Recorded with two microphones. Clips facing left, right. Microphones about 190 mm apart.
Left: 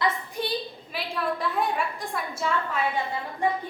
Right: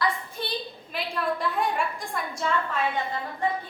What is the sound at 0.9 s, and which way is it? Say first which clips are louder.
A woman's voice: right 1 dB; centre (ahead or behind).